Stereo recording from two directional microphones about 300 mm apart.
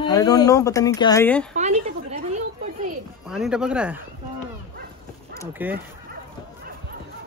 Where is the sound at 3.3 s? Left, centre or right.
Centre.